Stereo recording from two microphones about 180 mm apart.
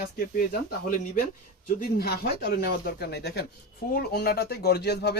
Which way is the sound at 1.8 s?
55° left (ahead or behind).